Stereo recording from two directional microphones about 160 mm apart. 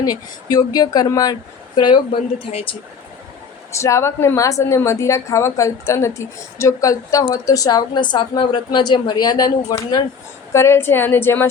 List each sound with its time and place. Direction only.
0.0 s a woman's voice: 25° left (ahead or behind)
3.7 s a woman's voice: 20° left (ahead or behind)